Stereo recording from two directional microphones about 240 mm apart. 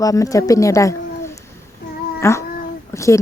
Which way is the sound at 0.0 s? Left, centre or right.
Centre.